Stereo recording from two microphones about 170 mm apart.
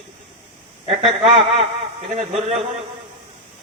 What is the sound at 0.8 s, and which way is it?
A man's voice, 35° right (ahead or behind).